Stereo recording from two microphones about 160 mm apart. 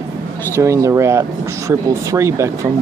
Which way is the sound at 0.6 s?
20° right (ahead or behind).